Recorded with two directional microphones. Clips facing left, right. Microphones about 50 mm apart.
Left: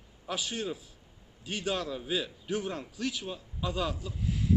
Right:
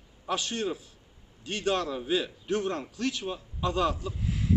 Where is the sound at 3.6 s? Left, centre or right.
Centre.